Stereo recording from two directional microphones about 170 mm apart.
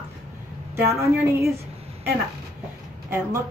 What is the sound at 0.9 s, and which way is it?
Speech, 15° right (ahead or behind).